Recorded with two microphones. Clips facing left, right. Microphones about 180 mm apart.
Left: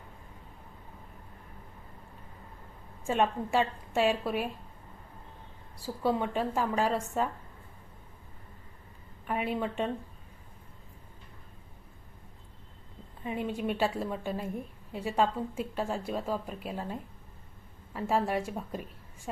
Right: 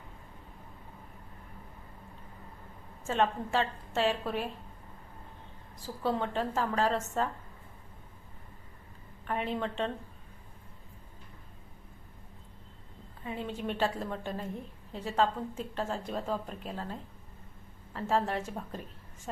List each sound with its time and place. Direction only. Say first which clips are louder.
3.1 s a woman's voice: left 1 dB; 15° left (ahead or behind)
5.8 s a woman's voice: left 2 dB; 10° left (ahead or behind)
9.2 s a woman's voice: left 2 dB; 10° left (ahead or behind)
13.2 s a woman's voice: left 4 dB; 15° left (ahead or behind)